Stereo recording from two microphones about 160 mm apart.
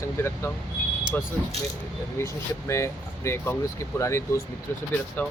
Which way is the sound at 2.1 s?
15° left (ahead or behind).